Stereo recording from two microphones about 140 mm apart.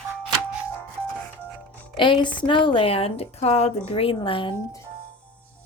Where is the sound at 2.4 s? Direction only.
35° left (ahead or behind).